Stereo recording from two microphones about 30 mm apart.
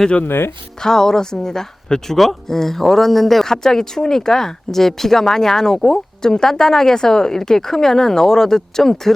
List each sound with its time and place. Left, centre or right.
0.8 s speech: centre
3.4 s speech: centre